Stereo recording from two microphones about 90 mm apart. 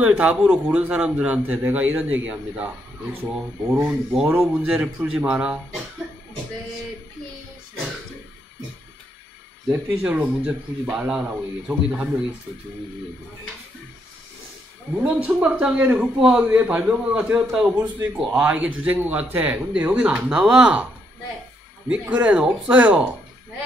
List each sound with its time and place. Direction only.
0.0 s speech: 15° right (ahead or behind)
3.8 s speech: 5° right (ahead or behind)
10.0 s speech: 10° right (ahead or behind)
11.2 s speech: 15° right (ahead or behind)
15.0 s speech: 10° right (ahead or behind)
16.2 s a man's voice: 5° right (ahead or behind)
16.4 s speech: 20° right (ahead or behind)
21.8 s speech: 15° right (ahead or behind)